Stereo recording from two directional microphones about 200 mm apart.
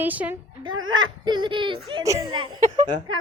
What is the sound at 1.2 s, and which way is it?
Speech, 20° right (ahead or behind).